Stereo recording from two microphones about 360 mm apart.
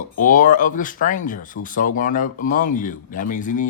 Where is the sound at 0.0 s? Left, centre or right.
Left.